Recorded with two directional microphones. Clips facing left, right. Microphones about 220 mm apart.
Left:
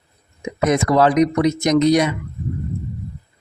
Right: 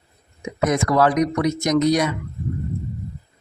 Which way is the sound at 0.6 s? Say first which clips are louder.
Left 2 dB; 25° left (ahead or behind).